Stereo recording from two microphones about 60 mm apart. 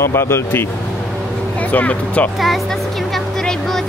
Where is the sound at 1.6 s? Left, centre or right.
Left.